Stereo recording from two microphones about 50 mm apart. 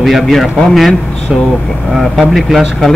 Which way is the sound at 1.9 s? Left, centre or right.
Centre.